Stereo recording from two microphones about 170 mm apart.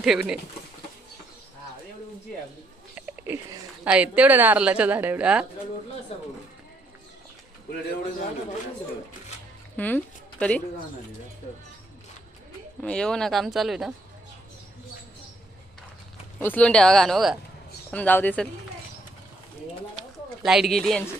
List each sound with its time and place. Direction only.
0.0 s speech: 5° right (ahead or behind)
2.9 s speech: 10° right (ahead or behind)
6.1 s speech: 35° left (ahead or behind)
9.7 s speech: 10° left (ahead or behind)
12.8 s speech: 5° left (ahead or behind)
16.4 s speech: 10° left (ahead or behind)
20.0 s a sound: centre (ahead or behind)